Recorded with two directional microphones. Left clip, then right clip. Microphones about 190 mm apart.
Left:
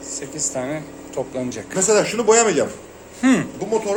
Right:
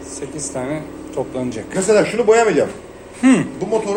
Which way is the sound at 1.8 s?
60° left (ahead or behind).